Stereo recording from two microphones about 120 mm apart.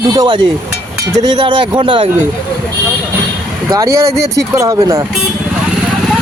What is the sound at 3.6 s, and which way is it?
Speech, 30° right (ahead or behind).